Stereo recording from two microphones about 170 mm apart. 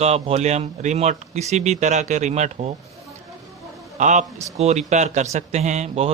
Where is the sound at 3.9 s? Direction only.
45° right (ahead or behind).